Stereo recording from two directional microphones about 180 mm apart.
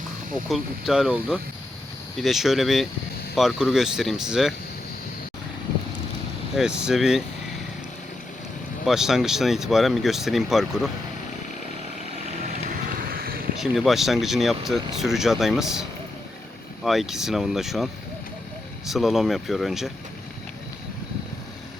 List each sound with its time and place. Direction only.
0.4 s speech: centre (ahead or behind)
6.6 s speech: 5° right (ahead or behind)
8.9 s speech: centre (ahead or behind)
12.7 s vehicle: 50° right (ahead or behind)
13.6 s speech: centre (ahead or behind)
18.9 s speech: centre (ahead or behind)